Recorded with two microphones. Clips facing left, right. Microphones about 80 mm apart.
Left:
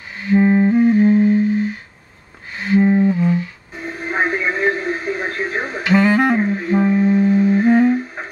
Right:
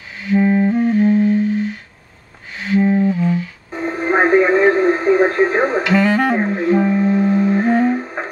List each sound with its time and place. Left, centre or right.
0.3 s music: centre
3.7 s radio: right
5.9 s music: centre
6.3 s clarinet: right
6.7 s music: centre
7.0 s music: right
7.2 s music: right